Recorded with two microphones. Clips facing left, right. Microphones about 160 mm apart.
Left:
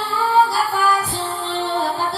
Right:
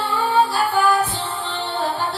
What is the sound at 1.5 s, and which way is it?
Music, 40° left (ahead or behind).